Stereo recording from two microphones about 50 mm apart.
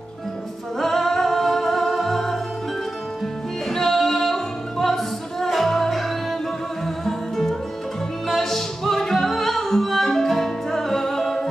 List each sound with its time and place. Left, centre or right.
0.7 s music: centre
3.6 s music: centre